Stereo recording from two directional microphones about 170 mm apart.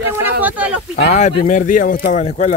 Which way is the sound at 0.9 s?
40° left (ahead or behind).